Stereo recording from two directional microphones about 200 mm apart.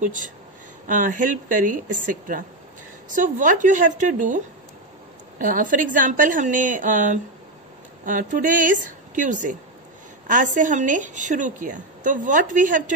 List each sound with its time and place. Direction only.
0.0 s a woman's voice: 40° right (ahead or behind)
5.4 s a woman's voice: 40° right (ahead or behind)